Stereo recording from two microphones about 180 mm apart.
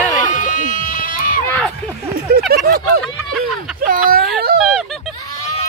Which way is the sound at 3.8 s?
50° right (ahead or behind).